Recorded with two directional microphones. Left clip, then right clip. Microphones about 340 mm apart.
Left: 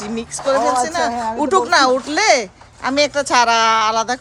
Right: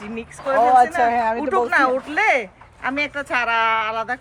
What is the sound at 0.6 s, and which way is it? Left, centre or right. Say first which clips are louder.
Speech: right 3 dB; right.